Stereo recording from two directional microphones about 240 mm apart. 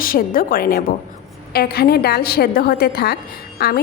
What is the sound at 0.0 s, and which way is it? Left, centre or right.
A woman's voice, left.